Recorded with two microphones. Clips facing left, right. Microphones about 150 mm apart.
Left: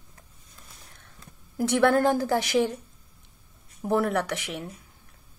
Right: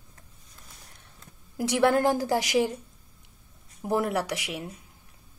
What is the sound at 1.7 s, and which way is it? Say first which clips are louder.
A woman's voice: left 1 dB; 15° right (ahead or behind).